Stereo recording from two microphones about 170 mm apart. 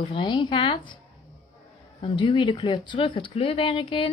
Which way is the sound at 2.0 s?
30° left (ahead or behind).